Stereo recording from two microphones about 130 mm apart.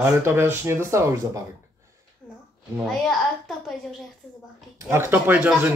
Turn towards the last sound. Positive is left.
turn(degrees=-15)  # may be behind; listen again after turning